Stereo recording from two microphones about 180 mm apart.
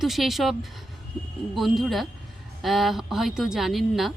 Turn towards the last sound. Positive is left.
turn(degrees=0)  # may be behind; listen again after turning